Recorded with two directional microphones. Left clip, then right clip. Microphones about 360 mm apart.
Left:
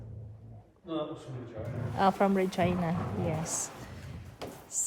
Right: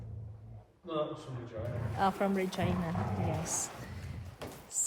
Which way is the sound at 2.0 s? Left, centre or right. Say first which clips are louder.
Left 5 dB; centre.